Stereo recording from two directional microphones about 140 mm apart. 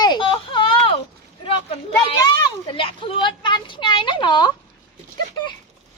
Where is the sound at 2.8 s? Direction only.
40° left (ahead or behind).